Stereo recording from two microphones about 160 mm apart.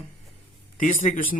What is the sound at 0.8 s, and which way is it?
Speech, 55° left (ahead or behind).